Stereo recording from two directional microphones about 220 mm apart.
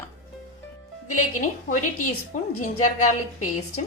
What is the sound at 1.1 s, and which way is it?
A woman's voice, 35° left (ahead or behind).